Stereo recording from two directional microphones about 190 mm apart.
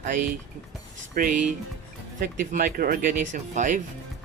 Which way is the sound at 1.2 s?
45° right (ahead or behind).